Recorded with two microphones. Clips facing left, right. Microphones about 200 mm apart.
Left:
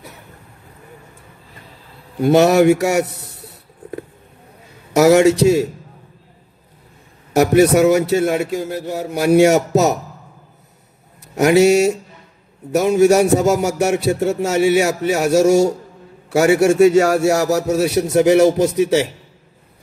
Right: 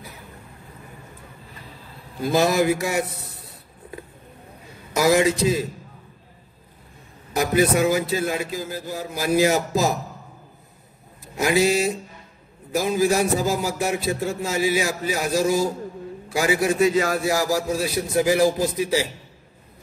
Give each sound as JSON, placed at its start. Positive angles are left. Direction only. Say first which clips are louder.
{"t": 2.1, "sound": "speech", "louder": "left 8 dB", "side_deg": 75}
{"t": 3.2, "sound": "a sound", "louder": "left 3 dB", "side_deg": 70}
{"t": 4.9, "sound": "speech", "louder": "left 8 dB", "side_deg": 75}
{"t": 7.3, "sound": "speech", "louder": "left 8 dB", "side_deg": 75}
{"t": 11.3, "sound": "speech", "louder": "left 8 dB", "side_deg": 70}